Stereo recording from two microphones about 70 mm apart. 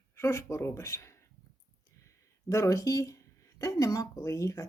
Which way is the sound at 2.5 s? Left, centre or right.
Left.